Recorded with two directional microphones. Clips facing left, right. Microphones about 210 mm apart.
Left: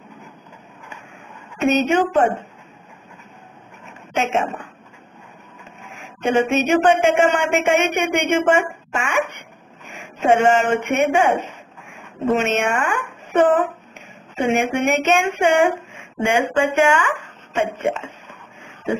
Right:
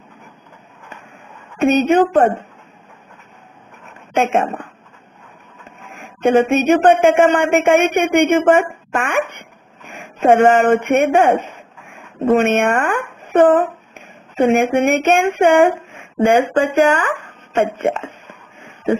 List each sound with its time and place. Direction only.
2.0 s speech: 55° right (ahead or behind)
4.1 s a woman's voice: 55° right (ahead or behind)
6.2 s speech: 55° right (ahead or behind)
12.4 s speech: 55° right (ahead or behind)
16.2 s speech: 35° right (ahead or behind)
17.5 s a sound: 55° right (ahead or behind)